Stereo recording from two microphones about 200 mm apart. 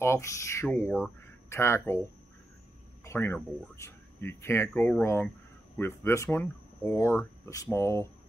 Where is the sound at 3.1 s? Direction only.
10° left (ahead or behind).